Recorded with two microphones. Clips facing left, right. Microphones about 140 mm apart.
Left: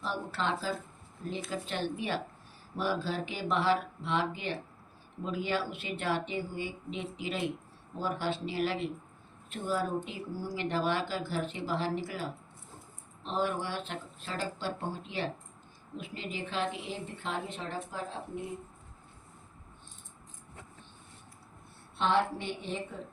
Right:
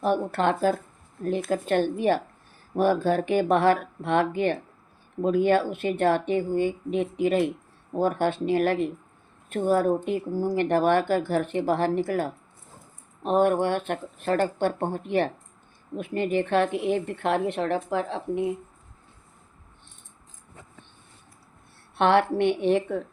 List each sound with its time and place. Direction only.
0.0 s speech: 55° right (ahead or behind); by 18.5 s 75° right (ahead or behind)
21.9 s a woman's voice: 70° right (ahead or behind)